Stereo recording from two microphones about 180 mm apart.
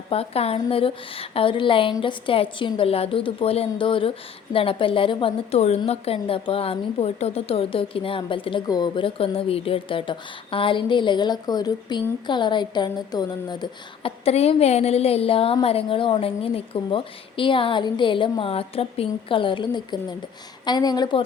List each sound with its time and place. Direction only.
0.1 s a woman's voice: 35° left (ahead or behind)